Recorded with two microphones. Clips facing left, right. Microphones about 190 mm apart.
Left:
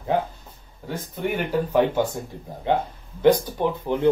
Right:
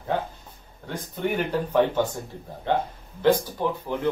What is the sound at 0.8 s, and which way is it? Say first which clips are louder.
Speech: left 1 dB; 5° left (ahead or behind).